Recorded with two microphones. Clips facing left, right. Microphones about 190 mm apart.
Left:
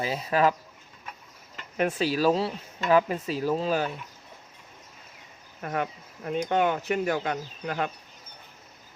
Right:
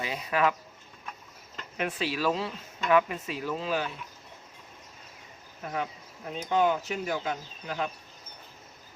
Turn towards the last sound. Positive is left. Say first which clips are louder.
# left 3 dB
turn(degrees=60)  # may be behind; listen again after turning